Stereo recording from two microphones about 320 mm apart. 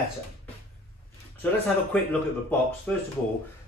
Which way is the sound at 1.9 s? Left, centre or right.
Centre.